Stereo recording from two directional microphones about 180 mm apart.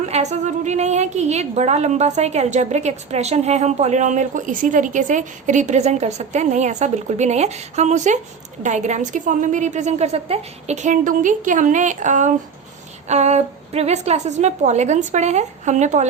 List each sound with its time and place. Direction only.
0.0 s a woman's voice: 40° right (ahead or behind)